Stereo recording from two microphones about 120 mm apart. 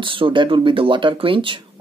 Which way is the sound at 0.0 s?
45° right (ahead or behind).